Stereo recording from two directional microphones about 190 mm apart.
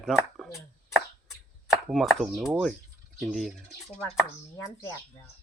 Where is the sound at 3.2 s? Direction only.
Centre (ahead or behind).